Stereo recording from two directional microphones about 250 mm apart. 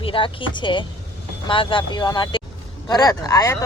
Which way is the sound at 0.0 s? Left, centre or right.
Centre.